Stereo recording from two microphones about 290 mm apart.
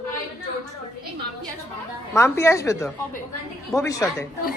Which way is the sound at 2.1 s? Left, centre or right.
Centre.